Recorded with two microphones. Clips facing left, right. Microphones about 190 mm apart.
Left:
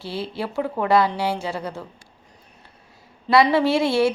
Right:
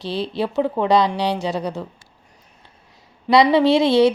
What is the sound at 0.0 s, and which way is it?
A woman's voice, 20° right (ahead or behind).